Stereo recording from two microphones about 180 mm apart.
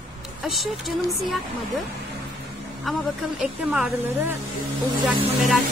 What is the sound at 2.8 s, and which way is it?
Speech, centre (ahead or behind).